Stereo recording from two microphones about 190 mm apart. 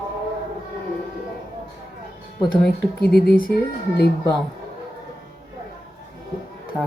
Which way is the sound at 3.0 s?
55° left (ahead or behind).